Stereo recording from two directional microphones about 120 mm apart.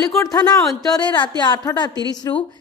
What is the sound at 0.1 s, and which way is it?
A woman's voice, 30° left (ahead or behind).